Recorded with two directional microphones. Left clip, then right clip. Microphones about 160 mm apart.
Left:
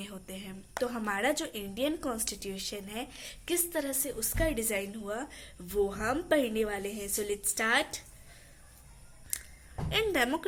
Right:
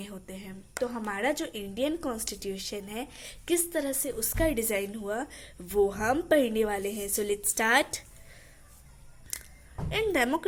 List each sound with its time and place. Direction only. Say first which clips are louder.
0.0 s a woman's voice: right 1 dB; 15° right (ahead or behind); by 8.0 s 35° right (ahead or behind)
9.3 s a sound: right 1 dB; 25° right (ahead or behind)
9.9 s a woman's voice: right 2 dB; 15° right (ahead or behind)